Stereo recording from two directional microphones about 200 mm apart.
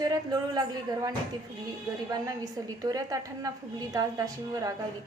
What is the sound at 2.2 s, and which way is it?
A woman's voice, 20° right (ahead or behind).